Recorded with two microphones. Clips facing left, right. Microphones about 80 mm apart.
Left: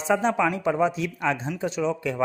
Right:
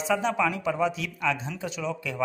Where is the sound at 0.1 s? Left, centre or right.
Left.